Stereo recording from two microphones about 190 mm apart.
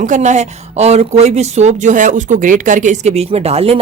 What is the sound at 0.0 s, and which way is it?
A woman's voice, 40° right (ahead or behind).